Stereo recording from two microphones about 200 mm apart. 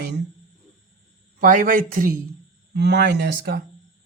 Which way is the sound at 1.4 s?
40° right (ahead or behind).